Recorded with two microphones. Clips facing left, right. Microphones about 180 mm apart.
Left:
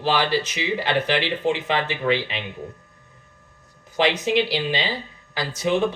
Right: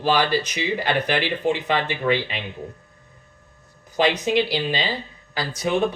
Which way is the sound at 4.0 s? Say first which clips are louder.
Even; 20° left (ahead or behind).